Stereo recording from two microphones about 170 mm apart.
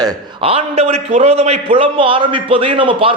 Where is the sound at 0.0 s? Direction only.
35° right (ahead or behind).